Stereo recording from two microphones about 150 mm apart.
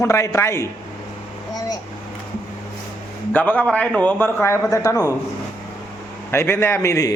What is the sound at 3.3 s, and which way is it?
A man's voice, 10° left (ahead or behind).